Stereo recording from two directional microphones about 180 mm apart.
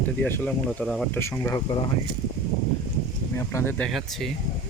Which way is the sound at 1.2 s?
15° left (ahead or behind).